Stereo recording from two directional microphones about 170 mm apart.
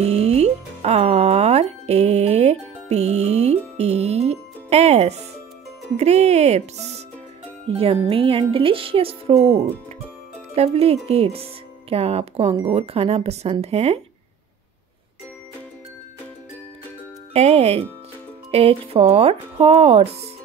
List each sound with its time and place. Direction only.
0.0 s music: 40° right (ahead or behind)
5.9 s speech: 40° right (ahead or behind)
17.3 s speech: 40° right (ahead or behind)